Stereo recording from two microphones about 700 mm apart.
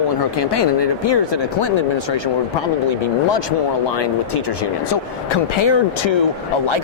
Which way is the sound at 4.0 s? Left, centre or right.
Left.